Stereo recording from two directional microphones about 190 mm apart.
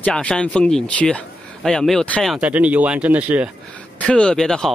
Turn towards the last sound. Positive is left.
turn(degrees=5)  # may be behind; listen again after turning